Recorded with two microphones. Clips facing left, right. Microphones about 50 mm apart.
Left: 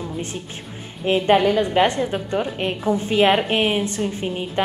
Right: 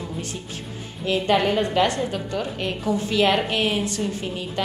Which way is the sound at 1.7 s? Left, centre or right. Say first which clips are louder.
Left 3 dB; left.